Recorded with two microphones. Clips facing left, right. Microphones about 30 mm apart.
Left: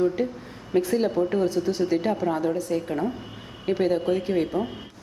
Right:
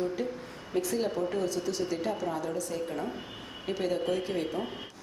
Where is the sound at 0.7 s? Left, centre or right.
Left.